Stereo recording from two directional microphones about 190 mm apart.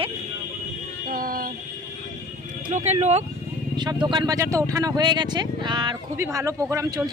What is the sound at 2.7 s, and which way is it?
Speech, 35° right (ahead or behind).